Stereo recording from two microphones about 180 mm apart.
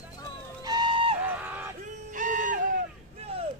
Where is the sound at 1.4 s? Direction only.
10° right (ahead or behind).